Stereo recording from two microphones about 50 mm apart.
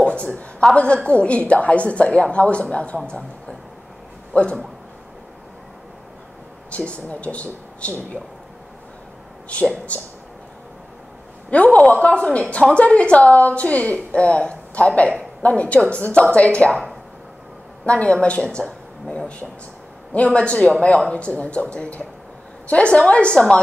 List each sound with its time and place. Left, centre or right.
0.0 s a woman's voice: left
6.7 s a woman's voice: left
9.5 s a woman's voice: left
11.5 s a woman's voice: left
17.8 s a woman's voice: left